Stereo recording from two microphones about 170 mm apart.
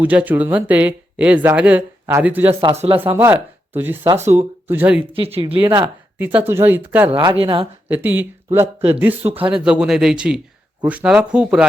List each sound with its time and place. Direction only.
0.0 s speech: 10° right (ahead or behind)
2.5 s speech: 30° right (ahead or behind)
3.0 s speech: 10° right (ahead or behind)
5.1 s speech: 35° right (ahead or behind)
6.1 s speech: 10° right (ahead or behind)
7.1 s speech: 30° right (ahead or behind)
7.9 s speech: 10° right (ahead or behind)